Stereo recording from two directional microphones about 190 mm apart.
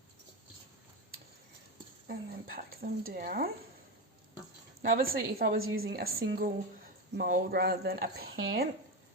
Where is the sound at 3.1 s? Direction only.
50° right (ahead or behind).